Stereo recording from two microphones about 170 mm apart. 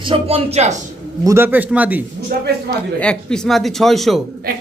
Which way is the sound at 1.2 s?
15° right (ahead or behind).